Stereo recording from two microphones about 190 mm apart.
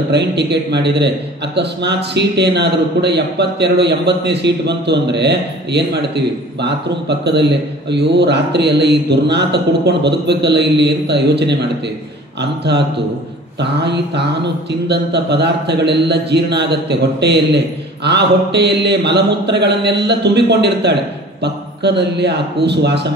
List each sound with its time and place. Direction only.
0.1 s speech: 65° right (ahead or behind)